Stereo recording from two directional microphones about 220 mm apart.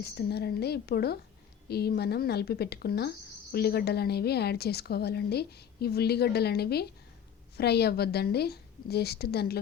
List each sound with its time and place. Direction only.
0.0 s a woman's voice: 45° left (ahead or behind)